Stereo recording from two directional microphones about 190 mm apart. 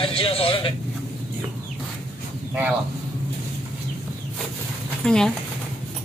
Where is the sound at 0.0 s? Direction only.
30° left (ahead or behind).